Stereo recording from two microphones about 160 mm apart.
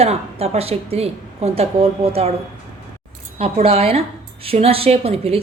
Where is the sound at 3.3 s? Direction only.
35° right (ahead or behind).